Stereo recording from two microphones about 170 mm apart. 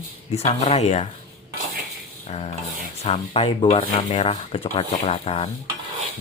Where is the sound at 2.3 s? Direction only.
40° left (ahead or behind).